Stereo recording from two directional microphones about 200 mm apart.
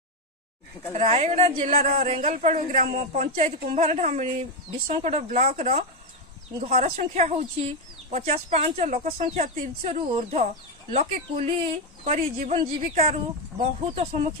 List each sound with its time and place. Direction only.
0.9 s a woman's voice: 30° right (ahead or behind)